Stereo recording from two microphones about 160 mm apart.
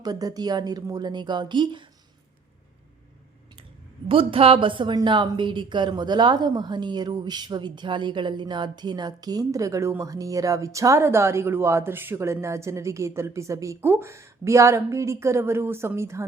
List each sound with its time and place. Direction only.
0.0 s a woman's voice: 25° right (ahead or behind)
4.1 s a woman's voice: 35° right (ahead or behind); by 16.2 s 15° right (ahead or behind)